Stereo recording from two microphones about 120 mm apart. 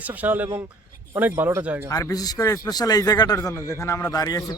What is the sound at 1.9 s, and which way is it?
A man's voice, 30° left (ahead or behind).